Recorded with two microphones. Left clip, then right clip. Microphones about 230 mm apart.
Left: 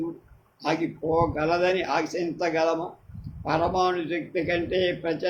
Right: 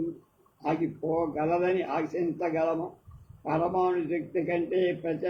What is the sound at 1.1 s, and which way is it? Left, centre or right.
A man's voice, left.